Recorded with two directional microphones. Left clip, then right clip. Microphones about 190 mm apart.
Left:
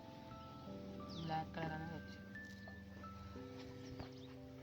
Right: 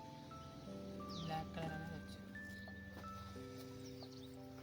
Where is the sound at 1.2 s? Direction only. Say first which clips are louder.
Left 3 dB; 15° right (ahead or behind).